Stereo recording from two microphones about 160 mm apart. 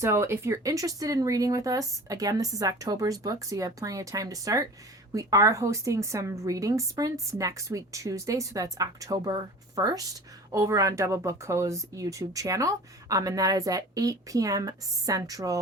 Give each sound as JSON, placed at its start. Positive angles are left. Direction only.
{"t": 0.0, "sound": "speech", "side_deg": -15}